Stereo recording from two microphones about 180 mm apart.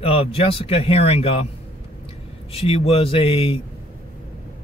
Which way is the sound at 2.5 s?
30° left (ahead or behind).